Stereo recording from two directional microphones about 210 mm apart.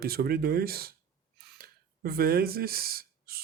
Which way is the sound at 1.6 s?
45° right (ahead or behind).